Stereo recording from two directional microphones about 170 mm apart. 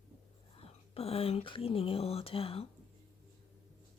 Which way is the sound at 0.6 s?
35° left (ahead or behind).